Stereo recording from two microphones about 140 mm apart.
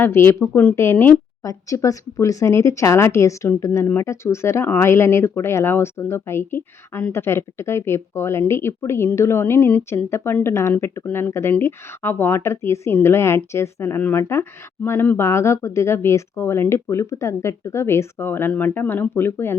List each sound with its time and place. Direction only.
0.0 s speech: 15° left (ahead or behind)